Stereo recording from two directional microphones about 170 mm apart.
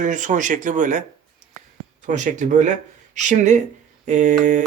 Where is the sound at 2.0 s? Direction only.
45° right (ahead or behind).